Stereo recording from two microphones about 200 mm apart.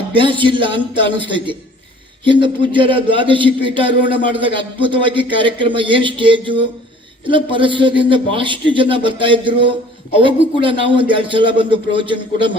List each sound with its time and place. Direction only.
0.1 s a man's voice: 25° right (ahead or behind)